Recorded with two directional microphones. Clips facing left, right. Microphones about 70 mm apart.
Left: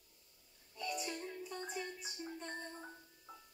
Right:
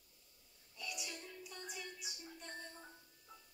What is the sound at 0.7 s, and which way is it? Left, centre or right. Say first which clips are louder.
Music: left 7 dB; left.